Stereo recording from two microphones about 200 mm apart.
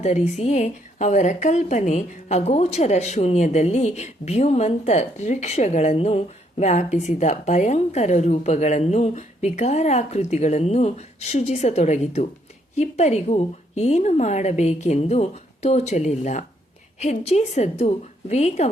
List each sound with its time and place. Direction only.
0.0 s a woman's voice: 35° left (ahead or behind)